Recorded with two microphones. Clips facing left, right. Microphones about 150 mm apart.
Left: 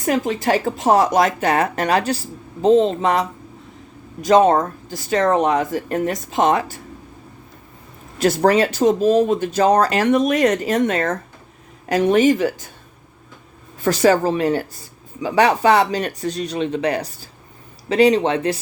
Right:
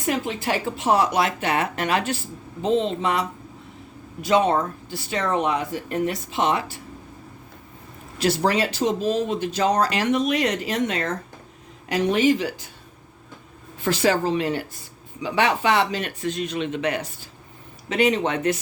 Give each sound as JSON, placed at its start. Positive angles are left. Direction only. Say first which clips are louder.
{"t": 0.0, "sound": "speech", "louder": "left 6 dB", "side_deg": 45}
{"t": 8.2, "sound": "speech", "louder": "left 6 dB", "side_deg": 50}
{"t": 13.8, "sound": "speech", "louder": "left 5 dB", "side_deg": 45}